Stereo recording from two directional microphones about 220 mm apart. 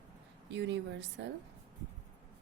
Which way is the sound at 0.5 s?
50° right (ahead or behind).